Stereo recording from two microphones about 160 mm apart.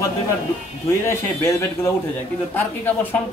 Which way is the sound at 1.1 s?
15° left (ahead or behind).